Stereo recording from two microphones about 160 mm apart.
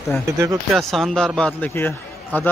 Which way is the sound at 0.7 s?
Centre (ahead or behind).